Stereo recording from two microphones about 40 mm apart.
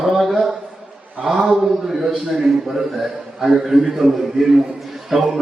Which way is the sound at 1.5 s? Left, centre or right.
Centre.